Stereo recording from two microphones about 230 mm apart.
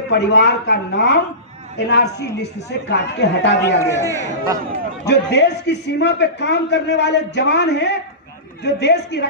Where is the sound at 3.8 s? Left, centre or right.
Centre.